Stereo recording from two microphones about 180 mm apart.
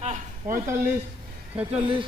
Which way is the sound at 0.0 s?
40° right (ahead or behind).